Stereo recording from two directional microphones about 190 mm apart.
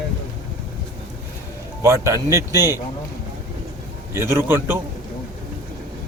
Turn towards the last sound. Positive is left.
turn(degrees=-10)  # may be behind; listen again after turning